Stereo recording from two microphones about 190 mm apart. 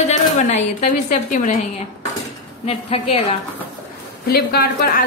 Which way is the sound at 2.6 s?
30° left (ahead or behind).